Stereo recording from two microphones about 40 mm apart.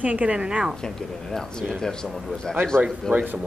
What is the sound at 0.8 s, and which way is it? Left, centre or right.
Speech, centre.